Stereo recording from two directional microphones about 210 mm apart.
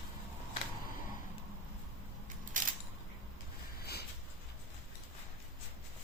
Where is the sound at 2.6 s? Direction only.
40° right (ahead or behind).